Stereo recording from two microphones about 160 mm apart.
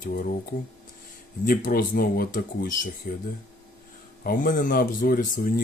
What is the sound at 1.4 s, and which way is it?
Speech, 60° left (ahead or behind).